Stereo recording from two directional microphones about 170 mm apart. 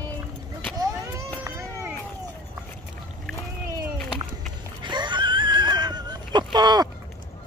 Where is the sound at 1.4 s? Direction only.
15° right (ahead or behind).